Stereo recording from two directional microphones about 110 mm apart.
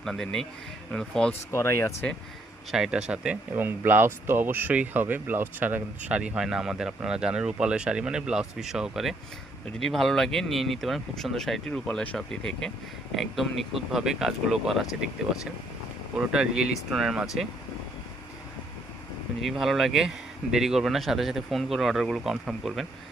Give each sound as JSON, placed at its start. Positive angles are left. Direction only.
{"t": 0.0, "sound": "speech", "side_deg": 5}
{"t": 1.3, "sound": "speech", "side_deg": 25}
{"t": 2.7, "sound": "speech", "side_deg": -5}
{"t": 16.1, "sound": "speech", "side_deg": -5}
{"t": 19.4, "sound": "speech", "side_deg": 0}